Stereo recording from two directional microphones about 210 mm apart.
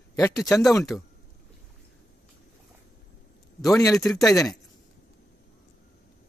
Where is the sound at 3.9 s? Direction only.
Centre (ahead or behind).